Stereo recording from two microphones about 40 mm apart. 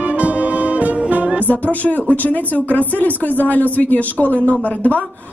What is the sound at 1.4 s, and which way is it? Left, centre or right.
Music, left.